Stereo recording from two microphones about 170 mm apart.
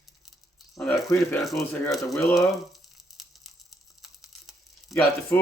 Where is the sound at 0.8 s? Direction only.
Centre (ahead or behind).